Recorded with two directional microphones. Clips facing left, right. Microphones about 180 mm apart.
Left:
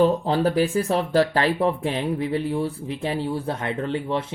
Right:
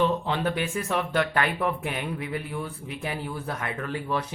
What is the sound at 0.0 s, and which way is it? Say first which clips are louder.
Speech: left 6 dB; 35° left (ahead or behind).